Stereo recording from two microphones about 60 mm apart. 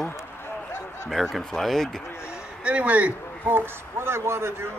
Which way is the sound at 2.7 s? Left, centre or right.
Right.